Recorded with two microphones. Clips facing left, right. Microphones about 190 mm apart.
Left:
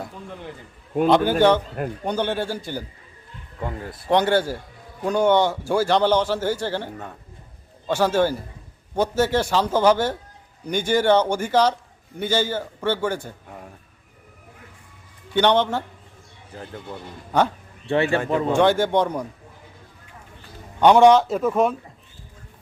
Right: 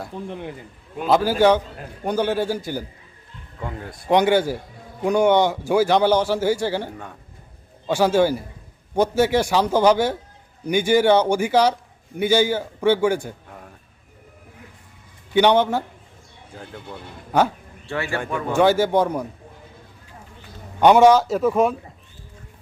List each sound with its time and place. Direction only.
0.3 s speech: 15° right (ahead or behind)
1.0 s a man's voice: 5° right (ahead or behind)
3.6 s a man's voice: 5° left (ahead or behind)
4.0 s speech: 15° right (ahead or behind)
15.3 s speech: 10° right (ahead or behind)
16.5 s a man's voice: centre (ahead or behind)
17.8 s a man's voice: 25° left (ahead or behind)
18.5 s speech: 5° right (ahead or behind)
20.8 s a man's voice: 5° right (ahead or behind)